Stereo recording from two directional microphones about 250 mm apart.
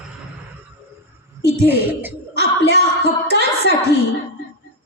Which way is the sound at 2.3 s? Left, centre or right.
Right.